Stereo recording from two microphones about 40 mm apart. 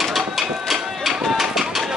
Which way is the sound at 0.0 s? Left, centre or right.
Centre.